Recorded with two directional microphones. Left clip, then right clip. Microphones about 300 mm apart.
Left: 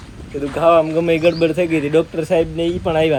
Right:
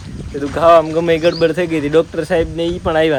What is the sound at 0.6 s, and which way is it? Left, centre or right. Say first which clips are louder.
Speech: right 3 dB; right.